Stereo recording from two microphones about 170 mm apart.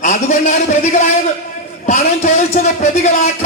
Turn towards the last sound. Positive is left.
turn(degrees=40)  # may be behind; listen again after turning